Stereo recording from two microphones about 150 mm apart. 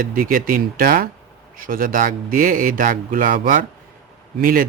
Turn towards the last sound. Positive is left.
turn(degrees=-70)  # may be behind; listen again after turning